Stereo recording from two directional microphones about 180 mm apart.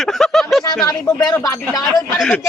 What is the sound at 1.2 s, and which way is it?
Speech, 20° left (ahead or behind).